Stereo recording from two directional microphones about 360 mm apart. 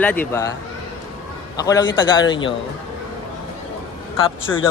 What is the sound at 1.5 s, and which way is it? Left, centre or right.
A man's voice, centre.